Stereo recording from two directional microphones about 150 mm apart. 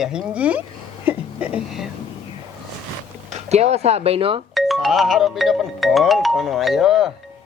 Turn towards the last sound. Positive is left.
turn(degrees=0)  # may be behind; listen again after turning